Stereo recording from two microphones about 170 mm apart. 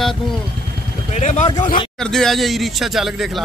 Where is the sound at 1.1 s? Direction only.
45° left (ahead or behind).